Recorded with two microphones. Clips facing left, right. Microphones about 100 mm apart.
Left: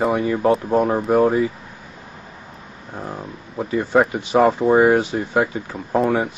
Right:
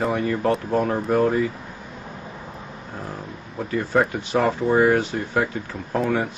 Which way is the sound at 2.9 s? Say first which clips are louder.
Left 4 dB; 20° left (ahead or behind).